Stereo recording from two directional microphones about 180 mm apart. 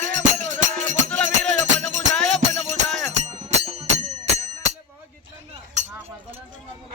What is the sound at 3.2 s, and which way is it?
Music, 35° right (ahead or behind).